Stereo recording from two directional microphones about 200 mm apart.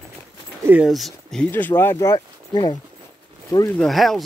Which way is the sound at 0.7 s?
5° right (ahead or behind).